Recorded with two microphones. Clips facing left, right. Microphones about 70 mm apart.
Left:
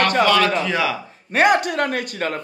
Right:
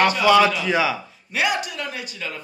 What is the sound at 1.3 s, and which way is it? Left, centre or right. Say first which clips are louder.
Speech: left 7 dB; left.